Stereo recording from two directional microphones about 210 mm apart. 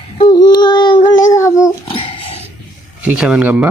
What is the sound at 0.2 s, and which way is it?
Child singing, 20° left (ahead or behind).